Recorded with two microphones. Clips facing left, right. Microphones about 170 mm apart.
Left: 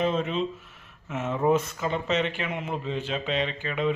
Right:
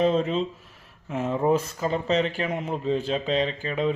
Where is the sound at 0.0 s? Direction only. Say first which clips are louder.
Right 3 dB; 35° right (ahead or behind).